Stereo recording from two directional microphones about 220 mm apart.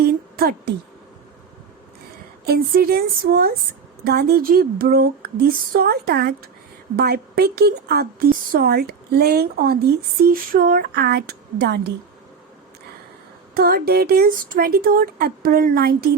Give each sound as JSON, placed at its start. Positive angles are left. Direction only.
{"t": 0.0, "sound": "a sound", "side_deg": -45}
{"t": 2.4, "sound": "a woman's voice", "side_deg": -45}
{"t": 13.5, "sound": "a woman's voice", "side_deg": -45}